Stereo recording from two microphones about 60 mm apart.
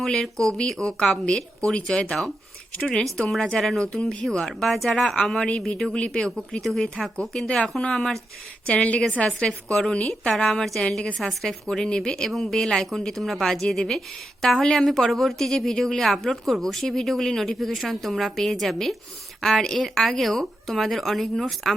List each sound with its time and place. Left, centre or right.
0.0 s speech: centre
3.2 s speech: centre
5.5 s a woman's voice: centre
7.4 s speech: centre
8.6 s a woman's voice: centre